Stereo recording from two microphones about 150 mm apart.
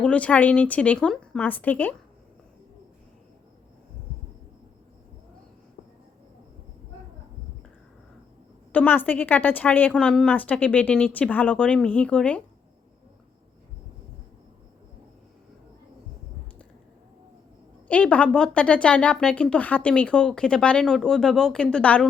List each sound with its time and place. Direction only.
0.0 s a woman's voice: 10° left (ahead or behind)
8.7 s a woman's voice: 10° left (ahead or behind)
17.8 s a woman's voice: 10° left (ahead or behind)